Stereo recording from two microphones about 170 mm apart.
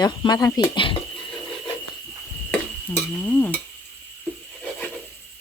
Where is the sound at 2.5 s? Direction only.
10° left (ahead or behind).